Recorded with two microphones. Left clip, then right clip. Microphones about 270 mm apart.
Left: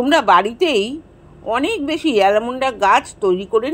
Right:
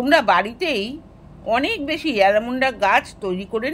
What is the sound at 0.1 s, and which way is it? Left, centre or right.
Speech, centre.